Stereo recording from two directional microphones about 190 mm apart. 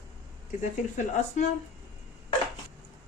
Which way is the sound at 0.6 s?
40° left (ahead or behind).